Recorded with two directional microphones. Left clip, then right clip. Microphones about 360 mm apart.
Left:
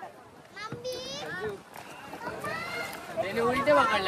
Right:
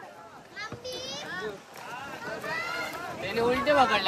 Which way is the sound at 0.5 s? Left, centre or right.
Centre.